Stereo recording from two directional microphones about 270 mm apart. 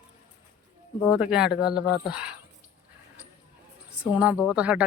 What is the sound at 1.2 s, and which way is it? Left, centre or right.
Speech, centre.